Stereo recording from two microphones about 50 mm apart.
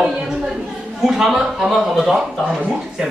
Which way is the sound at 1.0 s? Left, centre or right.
Centre.